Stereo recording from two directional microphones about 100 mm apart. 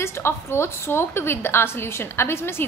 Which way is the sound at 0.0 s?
25° left (ahead or behind).